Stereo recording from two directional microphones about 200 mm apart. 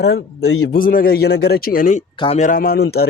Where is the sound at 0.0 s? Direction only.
75° left (ahead or behind).